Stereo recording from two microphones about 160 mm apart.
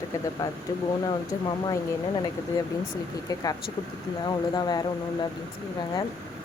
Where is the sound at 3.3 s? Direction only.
20° left (ahead or behind).